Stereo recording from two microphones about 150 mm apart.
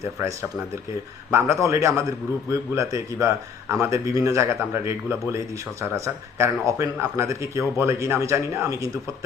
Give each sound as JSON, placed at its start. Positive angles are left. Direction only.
{"t": 0.0, "sound": "a man's voice", "side_deg": -20}